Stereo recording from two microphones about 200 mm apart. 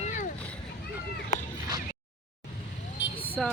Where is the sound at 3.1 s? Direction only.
10° left (ahead or behind).